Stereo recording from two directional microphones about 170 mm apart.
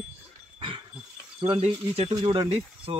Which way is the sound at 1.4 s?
35° right (ahead or behind).